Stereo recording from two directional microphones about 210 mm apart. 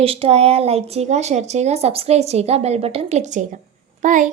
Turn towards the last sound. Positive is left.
turn(degrees=-35)  # may be behind; listen again after turning